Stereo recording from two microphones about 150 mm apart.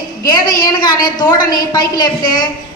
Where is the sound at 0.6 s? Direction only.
30° left (ahead or behind).